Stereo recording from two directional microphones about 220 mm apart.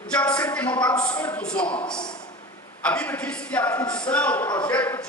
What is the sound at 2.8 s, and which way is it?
Speech, 5° left (ahead or behind).